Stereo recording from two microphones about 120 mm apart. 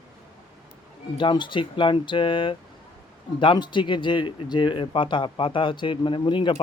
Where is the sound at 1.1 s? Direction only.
40° left (ahead or behind).